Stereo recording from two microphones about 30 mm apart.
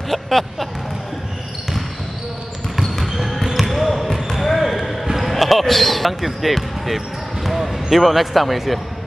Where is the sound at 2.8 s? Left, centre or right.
Centre.